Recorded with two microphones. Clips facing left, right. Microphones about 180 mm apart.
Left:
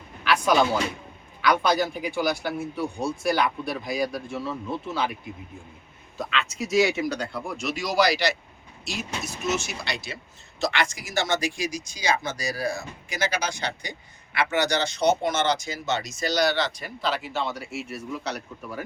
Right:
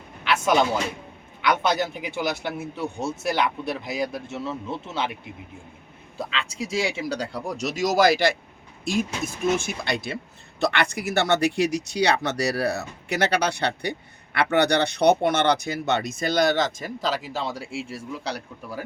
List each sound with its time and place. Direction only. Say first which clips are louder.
0.3 s a sound: even; 25° right (ahead or behind)
1.4 s a man's voice: left 1 dB; 20° right (ahead or behind)
6.1 s speech: left 1 dB; 30° right (ahead or behind)